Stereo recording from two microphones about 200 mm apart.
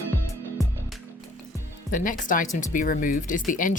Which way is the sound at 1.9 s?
40° left (ahead or behind).